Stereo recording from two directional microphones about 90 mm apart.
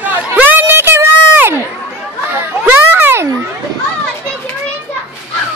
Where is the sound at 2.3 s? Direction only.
20° right (ahead or behind).